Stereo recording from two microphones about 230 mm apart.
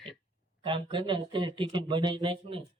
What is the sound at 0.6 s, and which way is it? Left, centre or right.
Speech, right.